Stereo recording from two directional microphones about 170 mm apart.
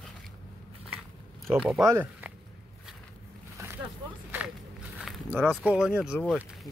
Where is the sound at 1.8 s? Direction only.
15° right (ahead or behind).